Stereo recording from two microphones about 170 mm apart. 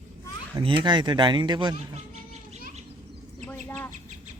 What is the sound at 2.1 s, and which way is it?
Children playing, 40° right (ahead or behind).